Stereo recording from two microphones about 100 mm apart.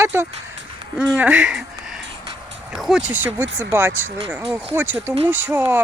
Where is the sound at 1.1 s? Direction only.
10° right (ahead or behind).